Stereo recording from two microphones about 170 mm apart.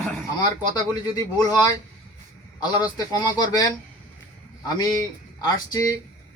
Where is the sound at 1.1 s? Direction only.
20° left (ahead or behind).